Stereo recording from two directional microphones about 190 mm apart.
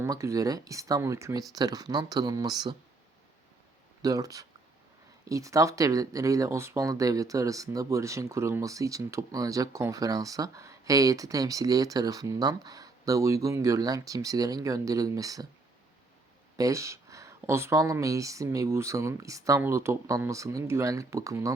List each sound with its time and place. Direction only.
0.0 s speech: 15° right (ahead or behind)
4.0 s speech: 20° right (ahead or behind)
16.6 s speech: 15° right (ahead or behind)